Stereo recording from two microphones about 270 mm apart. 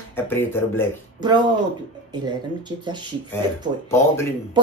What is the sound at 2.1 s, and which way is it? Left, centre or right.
Speech, centre.